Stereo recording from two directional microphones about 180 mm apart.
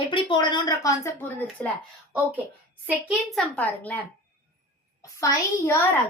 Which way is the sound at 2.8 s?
5° right (ahead or behind).